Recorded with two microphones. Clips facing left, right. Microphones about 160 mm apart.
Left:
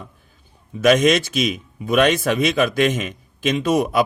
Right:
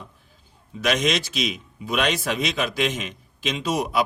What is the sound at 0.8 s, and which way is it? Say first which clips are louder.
A man's voice: left 8 dB; 50° left (ahead or behind).